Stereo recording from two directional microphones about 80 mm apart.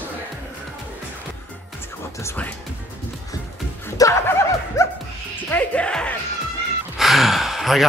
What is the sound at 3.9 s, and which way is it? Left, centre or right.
Snicker, left.